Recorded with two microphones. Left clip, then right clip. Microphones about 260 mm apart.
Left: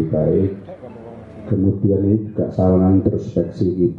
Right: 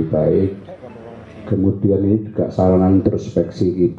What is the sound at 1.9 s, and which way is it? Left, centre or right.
A man's voice, left.